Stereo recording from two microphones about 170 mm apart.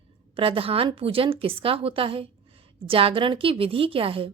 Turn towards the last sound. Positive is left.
turn(degrees=-30)  # may be behind; listen again after turning